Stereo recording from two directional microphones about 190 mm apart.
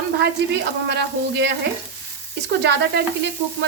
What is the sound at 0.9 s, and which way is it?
Speech, 60° right (ahead or behind).